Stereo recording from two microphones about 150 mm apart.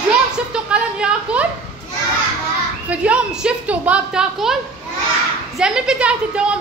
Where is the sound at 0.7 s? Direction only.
5° right (ahead or behind).